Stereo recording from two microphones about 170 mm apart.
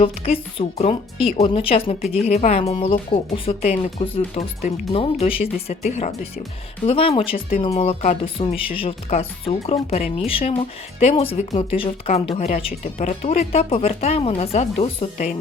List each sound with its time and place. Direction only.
0.0 s speech: 35° left (ahead or behind)